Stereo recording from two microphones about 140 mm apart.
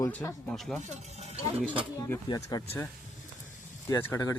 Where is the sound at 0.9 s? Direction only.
50° right (ahead or behind).